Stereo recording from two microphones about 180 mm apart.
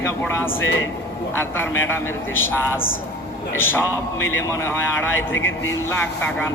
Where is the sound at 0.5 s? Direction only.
90° left.